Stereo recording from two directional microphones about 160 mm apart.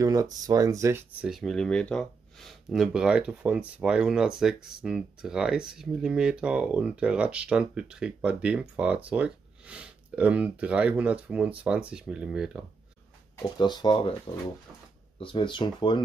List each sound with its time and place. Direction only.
0.0 s speech: 20° right (ahead or behind)
1.2 s speech: centre (ahead or behind)
13.6 s speech: 25° left (ahead or behind)